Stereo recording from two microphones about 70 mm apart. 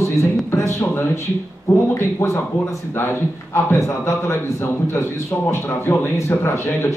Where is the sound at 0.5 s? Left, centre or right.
Left.